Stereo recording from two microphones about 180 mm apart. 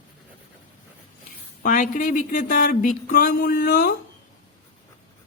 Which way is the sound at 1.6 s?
45° left (ahead or behind).